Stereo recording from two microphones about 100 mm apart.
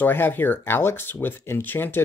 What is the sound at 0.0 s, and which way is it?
Speech, 20° left (ahead or behind).